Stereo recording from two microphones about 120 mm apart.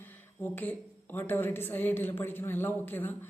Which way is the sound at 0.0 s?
15° left (ahead or behind).